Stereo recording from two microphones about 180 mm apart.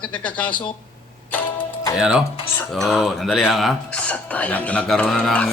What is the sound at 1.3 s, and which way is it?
Music, 10° left (ahead or behind).